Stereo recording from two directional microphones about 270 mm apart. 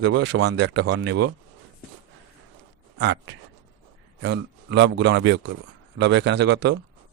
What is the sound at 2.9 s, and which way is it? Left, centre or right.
A man's voice, right.